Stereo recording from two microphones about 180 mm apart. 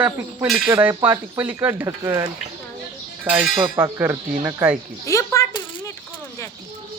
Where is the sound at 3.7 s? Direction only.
15° right (ahead or behind).